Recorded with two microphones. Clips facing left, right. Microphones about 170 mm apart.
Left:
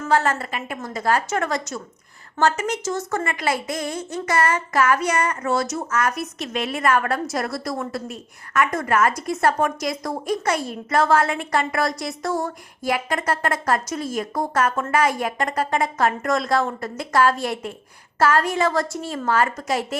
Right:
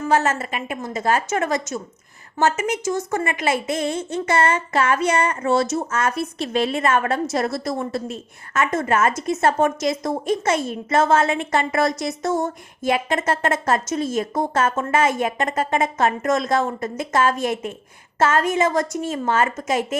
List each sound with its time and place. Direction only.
0.0 s a woman's voice: 20° right (ahead or behind)